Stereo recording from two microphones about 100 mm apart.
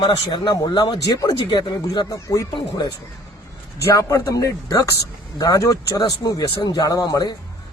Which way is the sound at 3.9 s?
30° left (ahead or behind).